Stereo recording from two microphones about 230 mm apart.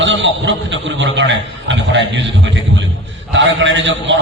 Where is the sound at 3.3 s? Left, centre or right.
Right.